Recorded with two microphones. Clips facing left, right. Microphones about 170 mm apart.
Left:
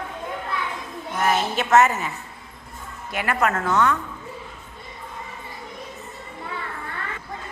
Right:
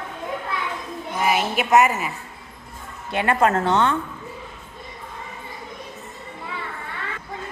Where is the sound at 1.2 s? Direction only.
10° right (ahead or behind).